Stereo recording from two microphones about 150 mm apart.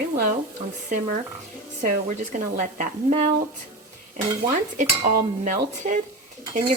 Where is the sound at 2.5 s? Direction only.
55° right (ahead or behind).